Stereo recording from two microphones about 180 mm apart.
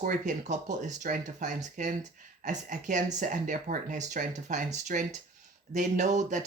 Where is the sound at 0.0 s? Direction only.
45° right (ahead or behind).